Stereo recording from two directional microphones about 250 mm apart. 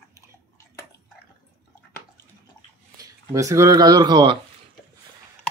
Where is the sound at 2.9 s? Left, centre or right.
Centre.